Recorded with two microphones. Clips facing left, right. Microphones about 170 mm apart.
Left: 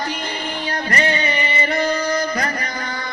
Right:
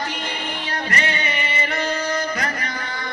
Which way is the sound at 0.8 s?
35° left (ahead or behind).